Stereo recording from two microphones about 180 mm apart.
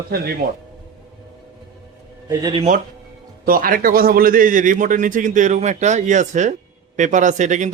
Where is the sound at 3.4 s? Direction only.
50° right (ahead or behind).